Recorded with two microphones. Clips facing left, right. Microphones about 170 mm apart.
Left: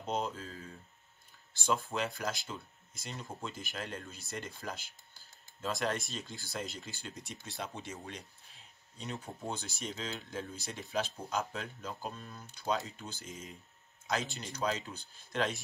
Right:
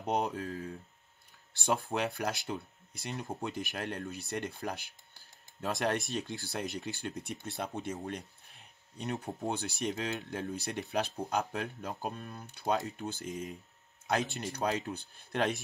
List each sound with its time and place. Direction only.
0.0 s speech: 65° right (ahead or behind)